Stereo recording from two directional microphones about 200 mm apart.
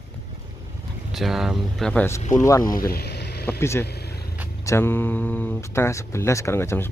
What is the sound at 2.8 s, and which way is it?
Vehicle, 50° left (ahead or behind).